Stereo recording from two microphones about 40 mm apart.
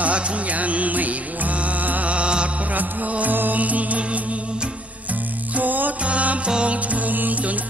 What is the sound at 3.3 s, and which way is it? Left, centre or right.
Music, right.